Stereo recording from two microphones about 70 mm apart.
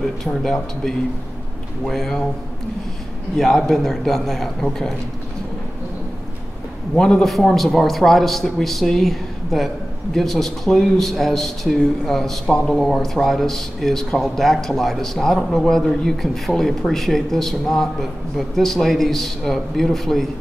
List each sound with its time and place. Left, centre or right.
0.2 s speech: centre
3.3 s speech: centre
7.0 s speech: centre